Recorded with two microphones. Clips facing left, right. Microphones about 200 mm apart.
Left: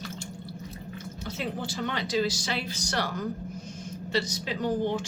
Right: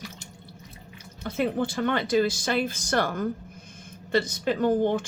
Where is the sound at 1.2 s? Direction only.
55° right (ahead or behind).